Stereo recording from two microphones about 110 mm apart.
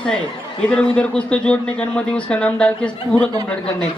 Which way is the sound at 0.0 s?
10° left (ahead or behind).